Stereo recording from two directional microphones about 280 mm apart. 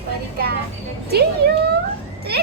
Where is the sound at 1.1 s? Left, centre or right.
Right.